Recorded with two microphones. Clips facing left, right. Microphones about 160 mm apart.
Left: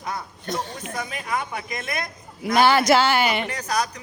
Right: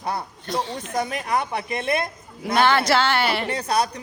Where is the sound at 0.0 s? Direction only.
35° right (ahead or behind).